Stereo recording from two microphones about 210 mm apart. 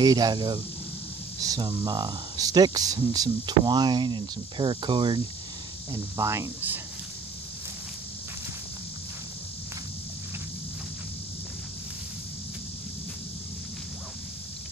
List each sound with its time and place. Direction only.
0.0 s speech: 20° right (ahead or behind)